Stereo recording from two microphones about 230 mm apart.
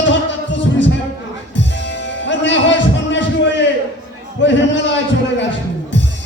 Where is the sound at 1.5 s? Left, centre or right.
Left.